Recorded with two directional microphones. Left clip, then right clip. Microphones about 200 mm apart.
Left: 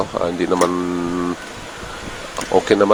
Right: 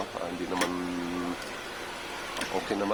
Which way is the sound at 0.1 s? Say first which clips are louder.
Left 17 dB; 35° left (ahead or behind).